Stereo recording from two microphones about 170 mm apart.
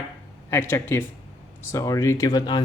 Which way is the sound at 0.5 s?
15° left (ahead or behind).